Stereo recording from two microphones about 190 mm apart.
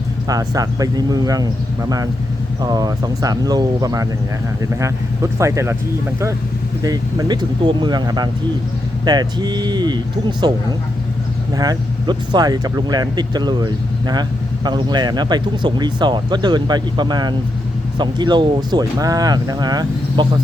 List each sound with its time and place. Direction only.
0.3 s speech: 20° right (ahead or behind)
6.8 s speech: 20° right (ahead or behind)
11.5 s speech: 20° right (ahead or behind)